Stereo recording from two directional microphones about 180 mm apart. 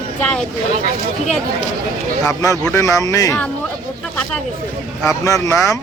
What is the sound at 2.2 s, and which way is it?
Speech, 15° left (ahead or behind).